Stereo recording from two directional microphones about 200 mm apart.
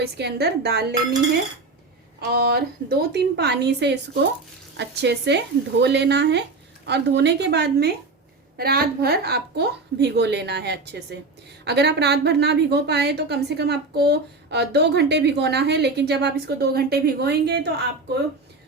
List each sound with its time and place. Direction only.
0.0 s a woman's voice: 55° right (ahead or behind)
2.3 s a woman's voice: 50° right (ahead or behind)